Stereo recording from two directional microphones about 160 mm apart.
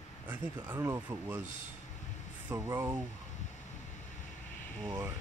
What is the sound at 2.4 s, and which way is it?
Speech, 15° right (ahead or behind).